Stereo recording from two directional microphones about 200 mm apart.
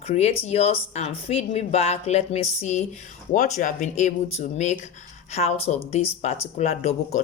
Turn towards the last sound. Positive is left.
turn(degrees=35)  # may be behind; listen again after turning